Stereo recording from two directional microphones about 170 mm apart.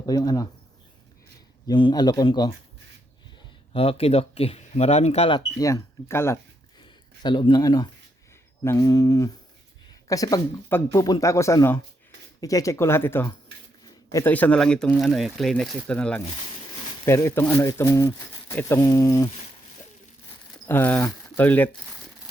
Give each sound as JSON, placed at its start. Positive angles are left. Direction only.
{"t": 0.0, "sound": "speech", "side_deg": 20}
{"t": 1.6, "sound": "speech", "side_deg": 25}
{"t": 3.7, "sound": "speech", "side_deg": 35}
{"t": 5.5, "sound": "speech", "side_deg": 20}
{"t": 6.7, "sound": "speech", "side_deg": 25}
{"t": 13.8, "sound": "a sound", "side_deg": 20}
{"t": 14.3, "sound": "speech", "side_deg": 10}
{"t": 20.7, "sound": "speech", "side_deg": 10}